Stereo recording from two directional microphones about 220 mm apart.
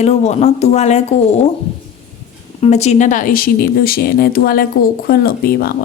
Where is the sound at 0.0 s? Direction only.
30° left (ahead or behind).